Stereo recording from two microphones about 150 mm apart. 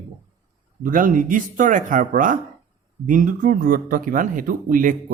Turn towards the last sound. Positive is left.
turn(degrees=-65)  # may be behind; listen again after turning